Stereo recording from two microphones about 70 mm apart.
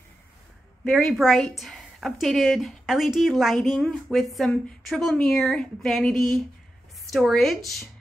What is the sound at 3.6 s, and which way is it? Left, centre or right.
A woman's voice, centre.